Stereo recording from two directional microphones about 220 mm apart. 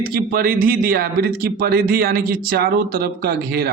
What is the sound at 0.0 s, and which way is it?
A man's voice, 40° right (ahead or behind).